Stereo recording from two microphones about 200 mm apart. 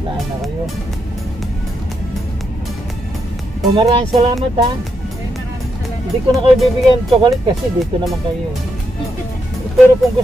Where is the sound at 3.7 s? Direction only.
25° right (ahead or behind).